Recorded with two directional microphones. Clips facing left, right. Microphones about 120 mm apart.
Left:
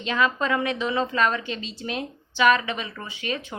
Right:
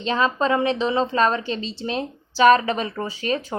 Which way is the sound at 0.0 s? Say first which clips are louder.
Right 3 dB; 30° right (ahead or behind).